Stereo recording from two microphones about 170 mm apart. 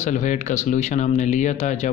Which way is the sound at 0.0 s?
45° left (ahead or behind).